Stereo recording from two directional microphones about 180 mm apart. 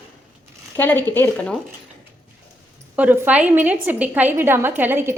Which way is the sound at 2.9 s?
10° right (ahead or behind).